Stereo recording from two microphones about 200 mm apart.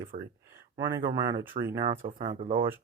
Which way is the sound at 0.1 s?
40° right (ahead or behind).